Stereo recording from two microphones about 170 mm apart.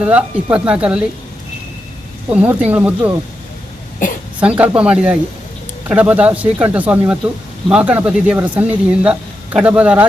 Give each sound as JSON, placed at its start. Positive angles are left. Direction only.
{"t": 0.0, "sound": "speech", "side_deg": -5}
{"t": 2.3, "sound": "speech", "side_deg": -5}
{"t": 4.4, "sound": "speech", "side_deg": -10}